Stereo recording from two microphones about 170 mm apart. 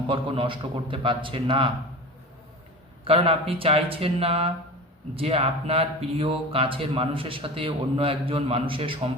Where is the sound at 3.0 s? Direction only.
35° right (ahead or behind).